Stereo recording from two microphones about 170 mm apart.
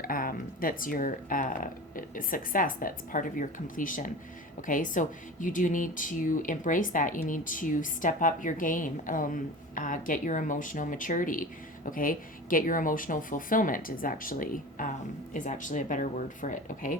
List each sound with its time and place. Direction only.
0.0 s speech: 55° left (ahead or behind)